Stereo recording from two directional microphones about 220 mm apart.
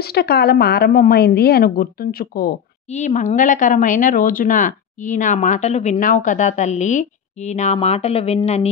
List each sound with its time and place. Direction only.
0.0 s a woman's voice: 45° left (ahead or behind); by 8.6 s 30° left (ahead or behind)